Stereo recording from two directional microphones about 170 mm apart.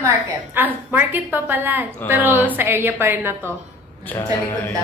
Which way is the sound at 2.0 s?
10° left (ahead or behind).